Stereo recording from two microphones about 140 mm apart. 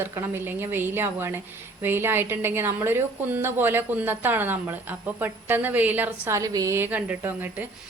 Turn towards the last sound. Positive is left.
turn(degrees=-15)  # may be behind; listen again after turning